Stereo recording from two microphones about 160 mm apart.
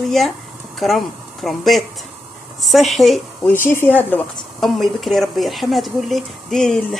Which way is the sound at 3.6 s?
10° left (ahead or behind).